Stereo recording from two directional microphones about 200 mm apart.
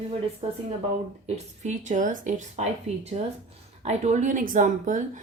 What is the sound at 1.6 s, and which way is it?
A woman's voice, 35° right (ahead or behind).